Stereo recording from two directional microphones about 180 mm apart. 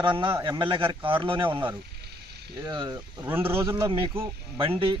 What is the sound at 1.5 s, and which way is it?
Speech, 10° right (ahead or behind).